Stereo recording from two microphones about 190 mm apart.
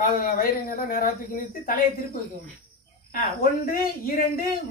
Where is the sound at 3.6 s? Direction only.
50° left (ahead or behind).